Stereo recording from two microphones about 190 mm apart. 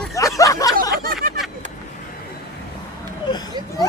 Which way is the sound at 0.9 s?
50° right (ahead or behind).